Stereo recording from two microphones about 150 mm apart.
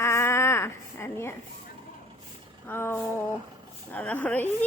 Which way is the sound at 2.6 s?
15° left (ahead or behind).